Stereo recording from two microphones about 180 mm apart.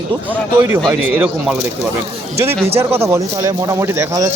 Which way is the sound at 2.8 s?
15° right (ahead or behind).